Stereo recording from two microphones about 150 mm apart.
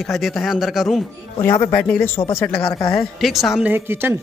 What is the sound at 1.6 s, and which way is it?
Speech, 10° left (ahead or behind).